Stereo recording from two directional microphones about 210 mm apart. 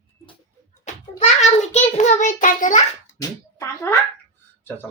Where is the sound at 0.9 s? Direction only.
35° left (ahead or behind).